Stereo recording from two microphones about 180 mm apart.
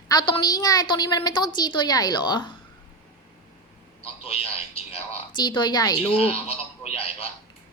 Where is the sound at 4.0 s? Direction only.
35° left (ahead or behind).